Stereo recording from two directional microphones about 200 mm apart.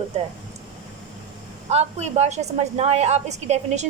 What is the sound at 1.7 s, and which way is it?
A woman's voice, 35° right (ahead or behind).